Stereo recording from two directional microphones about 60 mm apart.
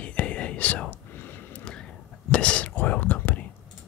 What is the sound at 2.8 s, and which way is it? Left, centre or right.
Whispering, left.